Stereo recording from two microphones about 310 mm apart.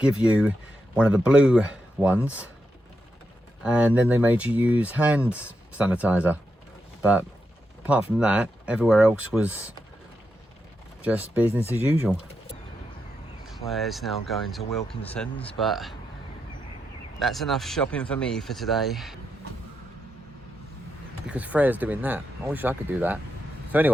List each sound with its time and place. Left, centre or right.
0.0 s speech: centre
3.6 s speech: centre
11.0 s speech: centre
13.4 s speech: centre
17.2 s speech: centre
21.2 s speech: centre